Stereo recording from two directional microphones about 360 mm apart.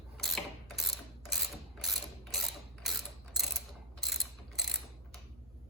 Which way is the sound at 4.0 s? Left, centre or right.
Centre.